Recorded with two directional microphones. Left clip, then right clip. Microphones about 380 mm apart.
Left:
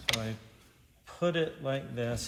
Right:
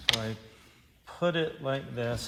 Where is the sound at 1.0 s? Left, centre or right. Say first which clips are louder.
Right 1 dB; centre.